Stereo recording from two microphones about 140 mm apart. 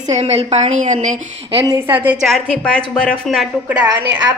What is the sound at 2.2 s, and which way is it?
Speech, 5° left (ahead or behind).